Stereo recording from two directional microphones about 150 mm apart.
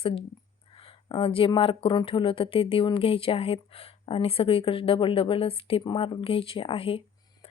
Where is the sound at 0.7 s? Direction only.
35° left (ahead or behind).